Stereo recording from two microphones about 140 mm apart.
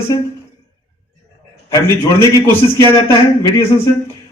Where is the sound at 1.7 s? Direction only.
20° left (ahead or behind).